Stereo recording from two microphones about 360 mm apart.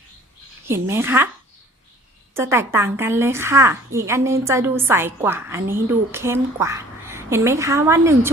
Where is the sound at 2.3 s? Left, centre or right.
Centre.